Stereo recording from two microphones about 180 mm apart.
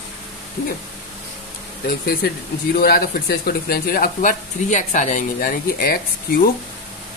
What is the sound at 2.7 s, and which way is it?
Speech, 55° left (ahead or behind).